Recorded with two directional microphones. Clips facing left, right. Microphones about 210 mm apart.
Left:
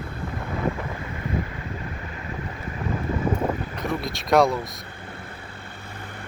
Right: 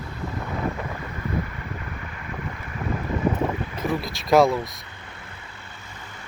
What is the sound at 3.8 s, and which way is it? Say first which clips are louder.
Speech: right 1 dB; centre (ahead or behind).